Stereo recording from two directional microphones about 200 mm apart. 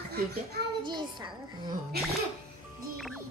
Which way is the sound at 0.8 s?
20° right (ahead or behind).